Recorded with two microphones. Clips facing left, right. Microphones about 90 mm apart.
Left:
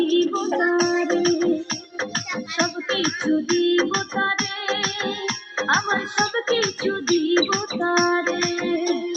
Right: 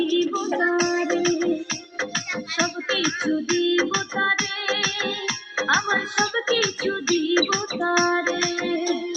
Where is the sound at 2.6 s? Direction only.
45° left (ahead or behind).